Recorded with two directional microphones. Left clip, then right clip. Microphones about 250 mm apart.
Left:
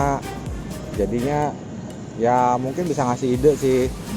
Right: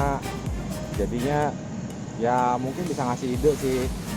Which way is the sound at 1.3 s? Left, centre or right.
Centre.